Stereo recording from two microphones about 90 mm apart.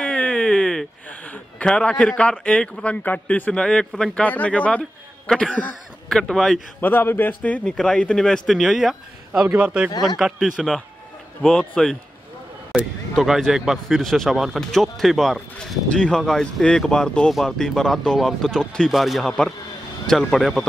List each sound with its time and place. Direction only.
0.0 s a sound: 10° left (ahead or behind)
1.3 s speech: 15° left (ahead or behind)
4.2 s speech: 15° left (ahead or behind)
6.8 s speech: 20° left (ahead or behind); by 20.6 s centre (ahead or behind)